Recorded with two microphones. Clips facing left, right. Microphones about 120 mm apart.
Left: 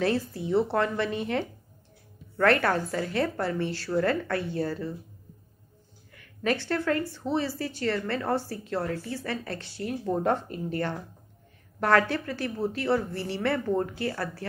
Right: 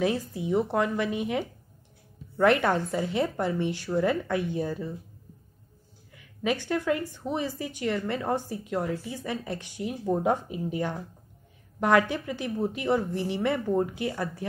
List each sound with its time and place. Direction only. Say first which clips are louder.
0.0 s a woman's voice: even; 15° right (ahead or behind)
6.1 s a woman's voice: left 1 dB; 10° right (ahead or behind)